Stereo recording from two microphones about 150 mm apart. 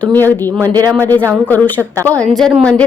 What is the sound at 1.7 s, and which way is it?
Speech, 20° right (ahead or behind).